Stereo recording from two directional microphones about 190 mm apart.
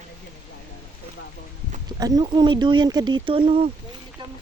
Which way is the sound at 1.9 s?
20° right (ahead or behind).